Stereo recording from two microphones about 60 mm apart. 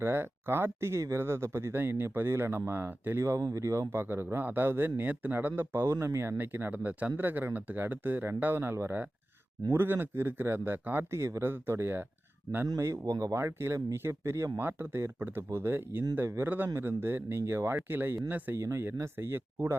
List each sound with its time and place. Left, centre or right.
0.0 s speech: right
3.2 s speech: right
5.9 s speech: right
11.1 s speech: right
12.8 s speech: right
13.3 s speech: right
14.6 s speech: right
18.5 s speech: right
19.1 s speech: right